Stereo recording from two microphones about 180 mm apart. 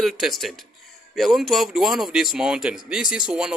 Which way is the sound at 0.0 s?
Centre (ahead or behind).